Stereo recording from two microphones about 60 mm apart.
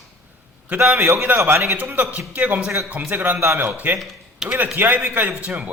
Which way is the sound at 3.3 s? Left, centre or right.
Right.